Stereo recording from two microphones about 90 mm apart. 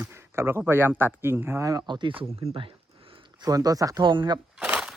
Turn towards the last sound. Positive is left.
turn(degrees=-10)  # may be behind; listen again after turning